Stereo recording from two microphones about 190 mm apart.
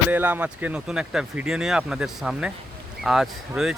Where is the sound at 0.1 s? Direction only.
10° right (ahead or behind).